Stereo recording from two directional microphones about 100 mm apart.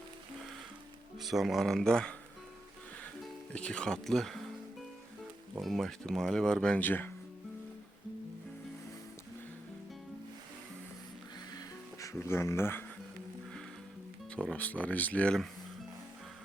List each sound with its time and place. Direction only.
1.2 s speech: centre (ahead or behind)
3.5 s speech: 10° left (ahead or behind)
5.5 s speech: centre (ahead or behind); by 7.1 s 20° left (ahead or behind)
11.5 s music: 30° left (ahead or behind)
14.5 s speech: 15° left (ahead or behind)